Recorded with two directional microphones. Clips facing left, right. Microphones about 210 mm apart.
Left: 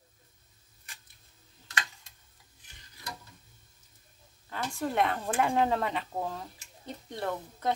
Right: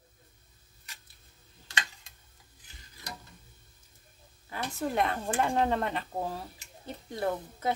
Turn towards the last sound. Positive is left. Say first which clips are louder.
# right 3 dB
turn(degrees=-5)  # may be behind; listen again after turning